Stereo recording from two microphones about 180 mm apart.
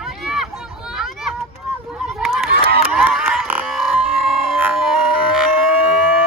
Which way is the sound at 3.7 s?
Centre (ahead or behind).